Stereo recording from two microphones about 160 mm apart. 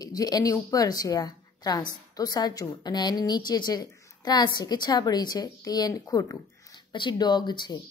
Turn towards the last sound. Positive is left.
turn(degrees=30)  # may be behind; listen again after turning